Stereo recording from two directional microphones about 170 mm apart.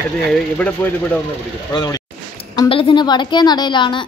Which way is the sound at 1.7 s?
20° left (ahead or behind).